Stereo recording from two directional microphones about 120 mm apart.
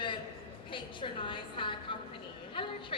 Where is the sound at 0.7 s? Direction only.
45° left (ahead or behind).